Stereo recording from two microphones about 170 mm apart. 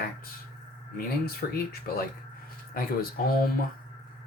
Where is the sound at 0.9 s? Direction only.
65° left (ahead or behind).